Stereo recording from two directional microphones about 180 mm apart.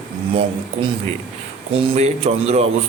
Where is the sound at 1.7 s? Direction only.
30° right (ahead or behind).